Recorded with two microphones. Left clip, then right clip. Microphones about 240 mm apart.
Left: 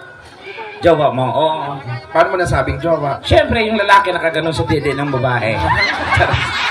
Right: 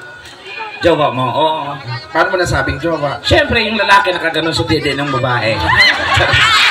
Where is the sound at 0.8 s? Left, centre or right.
Right.